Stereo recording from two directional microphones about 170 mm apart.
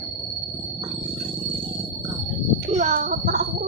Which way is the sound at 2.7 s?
45° right (ahead or behind).